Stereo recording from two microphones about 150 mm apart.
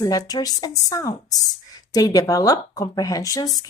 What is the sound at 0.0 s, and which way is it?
Speech, 25° left (ahead or behind).